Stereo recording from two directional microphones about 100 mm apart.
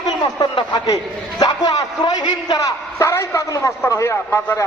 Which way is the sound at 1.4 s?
45° left (ahead or behind).